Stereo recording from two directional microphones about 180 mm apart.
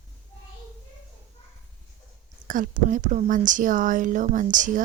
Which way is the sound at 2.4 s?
50° right (ahead or behind).